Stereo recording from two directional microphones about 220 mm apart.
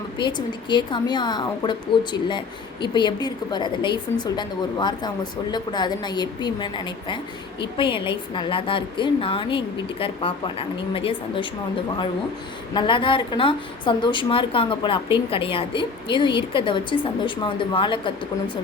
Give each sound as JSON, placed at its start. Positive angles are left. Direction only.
{"t": 0.2, "sound": "a woman's voice", "side_deg": 20}
{"t": 12.7, "sound": "a woman's voice", "side_deg": 20}